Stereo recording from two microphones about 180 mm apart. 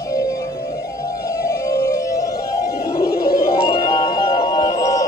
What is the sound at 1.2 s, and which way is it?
Music, 15° left (ahead or behind).